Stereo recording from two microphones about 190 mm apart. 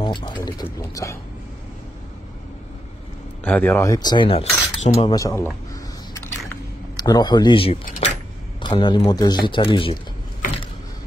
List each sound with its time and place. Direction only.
0.0 s a sound: 25° left (ahead or behind)
0.3 s speech: 15° left (ahead or behind)
3.4 s speech: 10° left (ahead or behind); by 5.1 s 35° left (ahead or behind)
5.1 s speech: 15° left (ahead or behind)
6.1 s a sound: 15° left (ahead or behind)
8.6 s speech: 25° left (ahead or behind)